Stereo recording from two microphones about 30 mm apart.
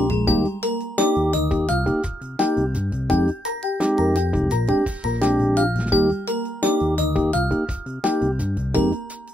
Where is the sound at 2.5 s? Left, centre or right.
Right.